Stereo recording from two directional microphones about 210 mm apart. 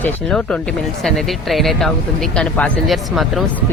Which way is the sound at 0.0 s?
5° left (ahead or behind).